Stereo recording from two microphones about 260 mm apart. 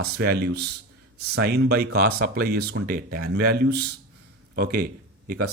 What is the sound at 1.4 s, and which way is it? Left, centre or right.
Speech, right.